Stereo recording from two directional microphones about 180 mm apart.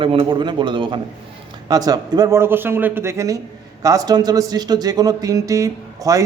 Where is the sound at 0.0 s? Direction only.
25° right (ahead or behind).